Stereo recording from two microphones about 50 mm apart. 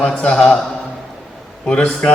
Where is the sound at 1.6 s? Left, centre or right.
Left.